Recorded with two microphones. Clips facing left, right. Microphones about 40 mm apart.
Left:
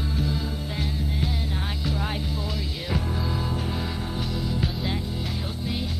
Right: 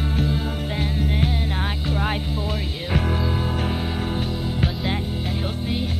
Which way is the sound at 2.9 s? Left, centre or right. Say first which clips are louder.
Right 6 dB; right.